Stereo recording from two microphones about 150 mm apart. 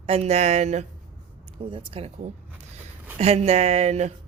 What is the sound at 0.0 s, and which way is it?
Speech, 45° right (ahead or behind).